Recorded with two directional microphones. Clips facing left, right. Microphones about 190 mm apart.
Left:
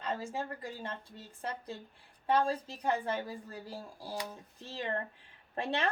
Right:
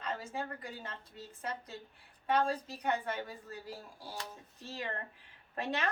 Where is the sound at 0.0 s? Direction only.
30° left (ahead or behind).